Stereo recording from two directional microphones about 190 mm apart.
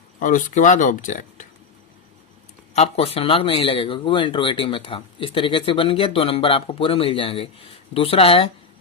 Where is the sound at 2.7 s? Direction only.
35° left (ahead or behind).